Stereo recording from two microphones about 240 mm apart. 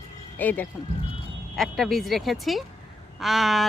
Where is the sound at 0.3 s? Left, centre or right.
Centre.